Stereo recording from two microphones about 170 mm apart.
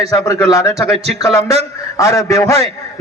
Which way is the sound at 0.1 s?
20° left (ahead or behind).